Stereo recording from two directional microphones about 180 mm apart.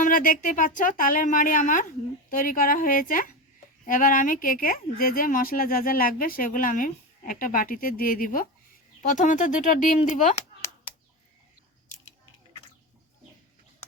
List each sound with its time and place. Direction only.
0.0 s speech: 50° left (ahead or behind)